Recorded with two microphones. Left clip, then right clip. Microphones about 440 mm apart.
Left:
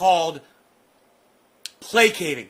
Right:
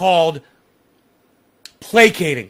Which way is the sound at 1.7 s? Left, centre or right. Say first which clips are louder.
Right 6 dB; right.